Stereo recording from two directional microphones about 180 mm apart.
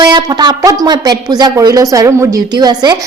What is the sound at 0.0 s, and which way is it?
A woman's voice, 20° right (ahead or behind).